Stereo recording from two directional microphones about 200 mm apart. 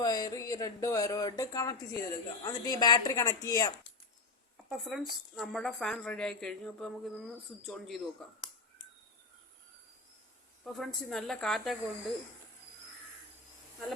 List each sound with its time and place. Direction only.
0.0 s speech: 20° left (ahead or behind)
4.5 s a woman's voice: centre (ahead or behind)
10.6 s a woman's voice: centre (ahead or behind)